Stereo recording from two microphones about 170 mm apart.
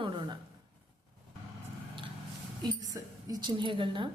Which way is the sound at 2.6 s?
20° right (ahead or behind).